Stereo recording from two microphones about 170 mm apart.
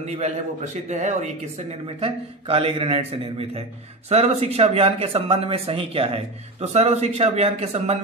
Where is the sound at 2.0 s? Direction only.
35° right (ahead or behind).